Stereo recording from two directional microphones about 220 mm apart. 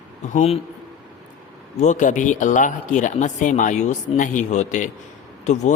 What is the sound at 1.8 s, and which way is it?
A man's voice, 35° left (ahead or behind).